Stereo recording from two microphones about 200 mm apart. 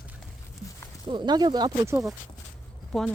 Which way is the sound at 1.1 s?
20° right (ahead or behind).